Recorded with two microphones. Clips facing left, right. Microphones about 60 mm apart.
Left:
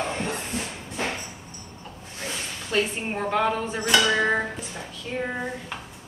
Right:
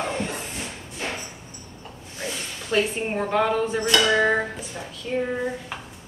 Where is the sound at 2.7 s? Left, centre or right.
Centre.